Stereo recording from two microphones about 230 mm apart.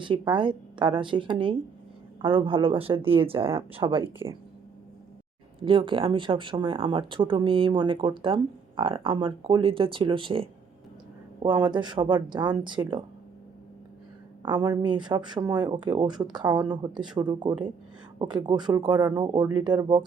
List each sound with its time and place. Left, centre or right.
0.0 s speech: right
5.6 s speech: right
14.4 s speech: centre